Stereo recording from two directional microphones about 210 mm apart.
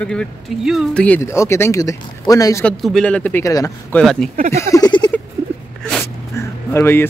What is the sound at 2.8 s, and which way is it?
Speech, centre (ahead or behind).